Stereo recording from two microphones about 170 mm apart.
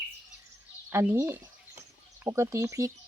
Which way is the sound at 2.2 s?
15° right (ahead or behind).